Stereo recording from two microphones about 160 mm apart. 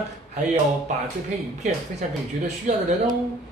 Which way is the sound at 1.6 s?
45° right (ahead or behind).